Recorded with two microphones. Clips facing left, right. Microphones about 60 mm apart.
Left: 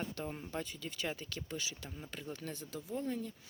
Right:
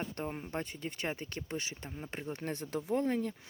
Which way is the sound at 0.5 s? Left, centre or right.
Right.